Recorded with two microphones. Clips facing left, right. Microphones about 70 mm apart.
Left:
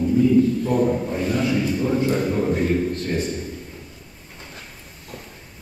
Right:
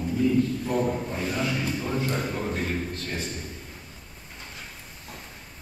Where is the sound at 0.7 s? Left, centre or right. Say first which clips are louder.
Left 6 dB; centre.